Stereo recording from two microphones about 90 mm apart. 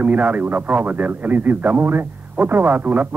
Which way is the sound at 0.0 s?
20° right (ahead or behind).